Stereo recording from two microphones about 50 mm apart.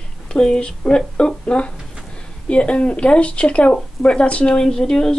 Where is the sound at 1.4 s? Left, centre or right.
Left.